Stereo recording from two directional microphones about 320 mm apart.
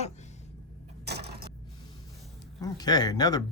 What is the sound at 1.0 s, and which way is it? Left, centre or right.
Vehicle, right.